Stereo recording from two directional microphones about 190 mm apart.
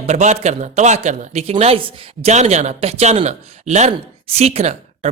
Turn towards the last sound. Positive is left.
turn(degrees=-35)  # may be behind; listen again after turning